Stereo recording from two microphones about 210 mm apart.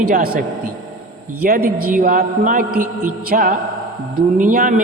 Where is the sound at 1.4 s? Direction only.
45° right (ahead or behind).